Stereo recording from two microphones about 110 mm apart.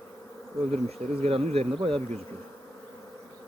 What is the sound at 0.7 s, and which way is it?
Speech, 65° right (ahead or behind).